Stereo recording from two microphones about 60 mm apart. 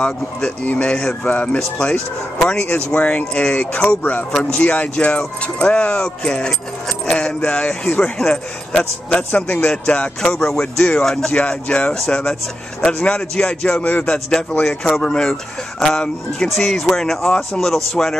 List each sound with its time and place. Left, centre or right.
0.7 s speech: left
10.2 s speech: centre